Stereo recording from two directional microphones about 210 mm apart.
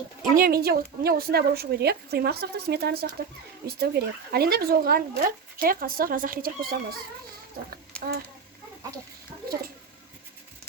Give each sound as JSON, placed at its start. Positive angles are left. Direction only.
{"t": 0.2, "sound": "speech", "side_deg": -40}